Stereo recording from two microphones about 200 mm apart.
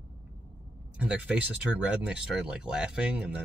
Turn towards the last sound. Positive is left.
turn(degrees=-5)  # may be behind; listen again after turning